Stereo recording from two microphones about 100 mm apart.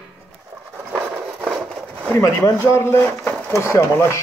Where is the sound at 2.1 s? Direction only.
30° left (ahead or behind).